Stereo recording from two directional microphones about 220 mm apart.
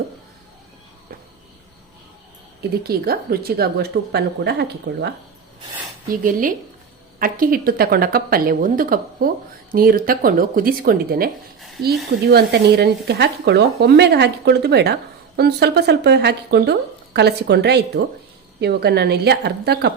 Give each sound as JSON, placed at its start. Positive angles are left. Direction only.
{"t": 2.6, "sound": "speech", "side_deg": -45}
{"t": 6.1, "sound": "a woman's voice", "side_deg": -40}
{"t": 12.3, "sound": "speech", "side_deg": -45}